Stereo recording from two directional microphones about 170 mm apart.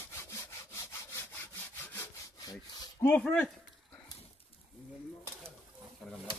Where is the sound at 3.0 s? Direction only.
10° left (ahead or behind).